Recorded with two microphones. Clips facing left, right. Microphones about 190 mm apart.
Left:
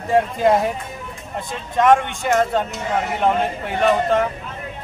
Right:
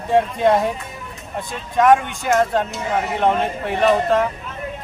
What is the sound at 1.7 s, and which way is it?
Speech, centre (ahead or behind).